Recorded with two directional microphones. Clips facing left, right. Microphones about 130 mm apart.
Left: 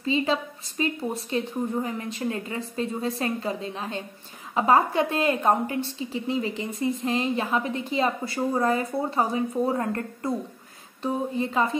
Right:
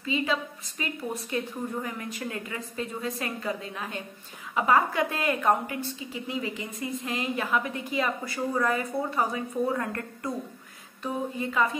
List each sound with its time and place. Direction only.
0.0 s a woman's voice: 30° left (ahead or behind)